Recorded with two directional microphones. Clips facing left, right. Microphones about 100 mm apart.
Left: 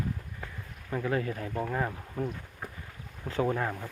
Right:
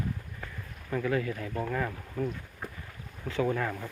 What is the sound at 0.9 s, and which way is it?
Speech, 20° left (ahead or behind).